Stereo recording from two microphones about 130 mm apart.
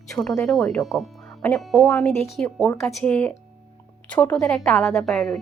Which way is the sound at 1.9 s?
15° left (ahead or behind).